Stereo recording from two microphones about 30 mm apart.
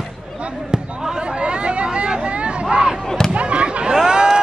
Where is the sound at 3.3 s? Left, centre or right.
Right.